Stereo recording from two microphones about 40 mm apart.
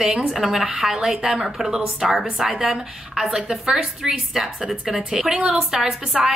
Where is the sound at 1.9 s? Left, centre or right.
Centre.